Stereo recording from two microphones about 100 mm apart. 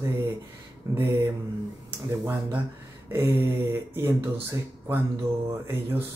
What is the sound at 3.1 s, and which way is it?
A man's voice, 20° right (ahead or behind).